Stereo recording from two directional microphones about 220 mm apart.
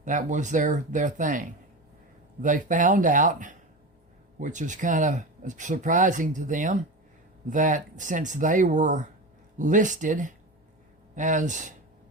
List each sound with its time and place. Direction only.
0.0 s speech: 35° right (ahead or behind)